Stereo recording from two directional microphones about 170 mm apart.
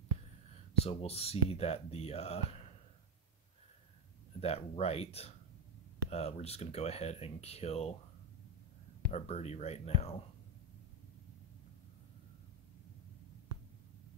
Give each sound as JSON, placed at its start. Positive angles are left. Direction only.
{"t": 0.8, "sound": "speech", "side_deg": 35}
{"t": 4.4, "sound": "speech", "side_deg": 35}
{"t": 9.1, "sound": "speech", "side_deg": 40}